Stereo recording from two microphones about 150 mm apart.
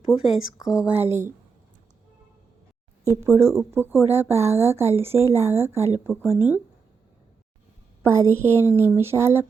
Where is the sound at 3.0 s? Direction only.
15° right (ahead or behind).